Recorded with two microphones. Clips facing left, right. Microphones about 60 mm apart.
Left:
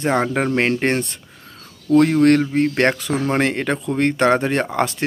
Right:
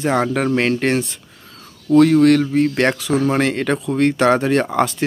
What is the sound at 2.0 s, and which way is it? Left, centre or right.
Speech, left.